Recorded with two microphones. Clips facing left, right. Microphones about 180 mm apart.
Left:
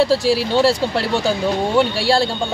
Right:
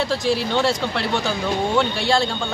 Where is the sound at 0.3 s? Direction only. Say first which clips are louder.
Left 4 dB; 10° left (ahead or behind).